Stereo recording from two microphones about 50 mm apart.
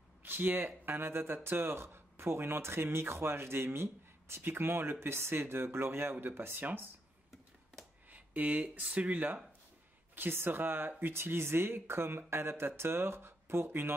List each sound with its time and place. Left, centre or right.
0.2 s speech: right
8.1 s speech: right
10.1 s speech: right